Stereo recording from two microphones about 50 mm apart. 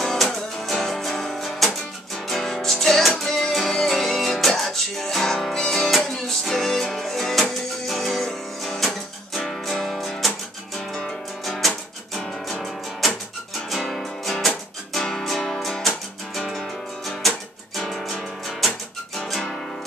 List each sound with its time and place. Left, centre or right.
0.0 s music: centre
11.4 s music: centre